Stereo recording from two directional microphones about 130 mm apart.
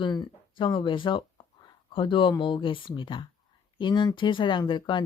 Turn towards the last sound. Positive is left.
turn(degrees=40)  # may be behind; listen again after turning